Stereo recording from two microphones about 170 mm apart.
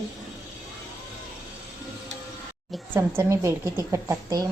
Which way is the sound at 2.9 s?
15° right (ahead or behind).